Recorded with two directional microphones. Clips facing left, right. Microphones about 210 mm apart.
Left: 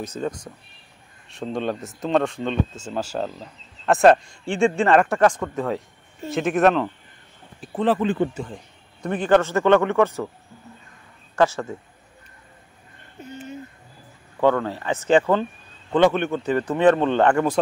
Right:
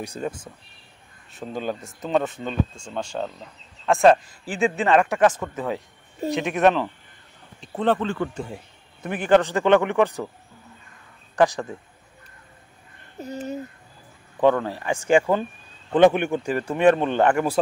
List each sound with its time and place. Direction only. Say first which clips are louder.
0.0 s speech: left 2 dB; 15° right (ahead or behind)
1.5 s speech: left 3 dB; 5° right (ahead or behind)
8.0 s speech: left 4 dB; 20° left (ahead or behind)
8.5 s a sound: right 1 dB; 5° right (ahead or behind)
9.3 s speech: even; 15° right (ahead or behind)
11.3 s speech: even; 15° right (ahead or behind)
13.2 s speech: right 5 dB; 40° right (ahead or behind)
14.4 s speech: even; 15° right (ahead or behind)